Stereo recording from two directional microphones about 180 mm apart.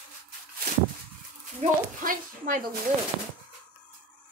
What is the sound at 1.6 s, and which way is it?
Speech, 45° right (ahead or behind).